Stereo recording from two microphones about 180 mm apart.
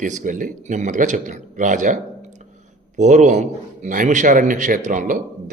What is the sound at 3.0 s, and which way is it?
A man's voice, 40° right (ahead or behind).